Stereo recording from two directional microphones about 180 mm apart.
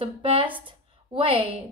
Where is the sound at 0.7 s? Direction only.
30° right (ahead or behind).